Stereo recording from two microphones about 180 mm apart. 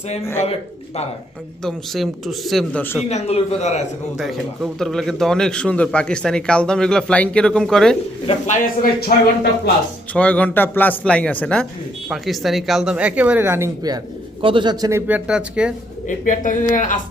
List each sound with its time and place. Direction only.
1.6 s a man's voice: centre (ahead or behind)
3.1 s a man's voice: 35° left (ahead or behind)
4.2 s a man's voice: centre (ahead or behind)
8.6 s speech: 55° left (ahead or behind)
10.2 s a man's voice: 10° left (ahead or behind)
16.0 s a woman's voice: 45° left (ahead or behind)